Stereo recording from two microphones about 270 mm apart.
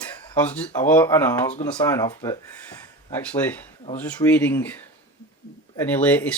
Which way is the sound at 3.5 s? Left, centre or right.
Centre.